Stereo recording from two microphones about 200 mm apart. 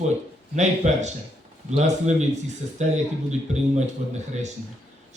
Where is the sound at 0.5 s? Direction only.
35° right (ahead or behind).